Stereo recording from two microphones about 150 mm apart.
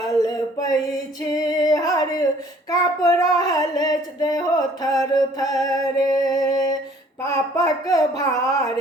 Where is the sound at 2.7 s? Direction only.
20° left (ahead or behind).